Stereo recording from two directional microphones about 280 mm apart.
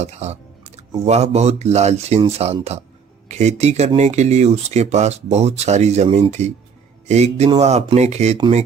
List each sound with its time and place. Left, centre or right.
0.0 s speech: right